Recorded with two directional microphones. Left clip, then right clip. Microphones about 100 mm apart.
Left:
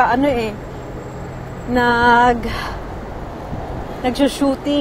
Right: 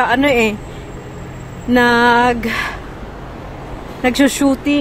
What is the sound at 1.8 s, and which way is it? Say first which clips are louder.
Speech: right 1 dB; 90° right.